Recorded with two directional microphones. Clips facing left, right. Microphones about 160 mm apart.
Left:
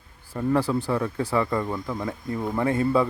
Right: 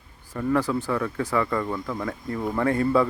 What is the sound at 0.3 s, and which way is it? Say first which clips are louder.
Speech: left 1 dB; 25° left (ahead or behind).